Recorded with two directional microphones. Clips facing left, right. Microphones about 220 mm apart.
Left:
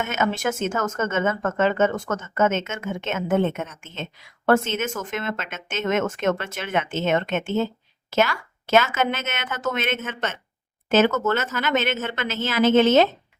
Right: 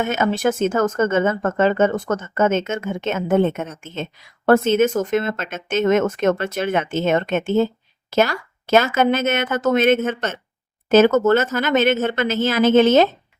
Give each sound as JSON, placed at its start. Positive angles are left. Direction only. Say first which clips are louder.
{"t": 0.0, "sound": "speech", "louder": "right 5 dB", "side_deg": -35}